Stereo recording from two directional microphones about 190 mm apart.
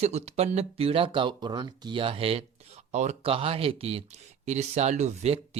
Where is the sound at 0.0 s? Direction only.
35° right (ahead or behind).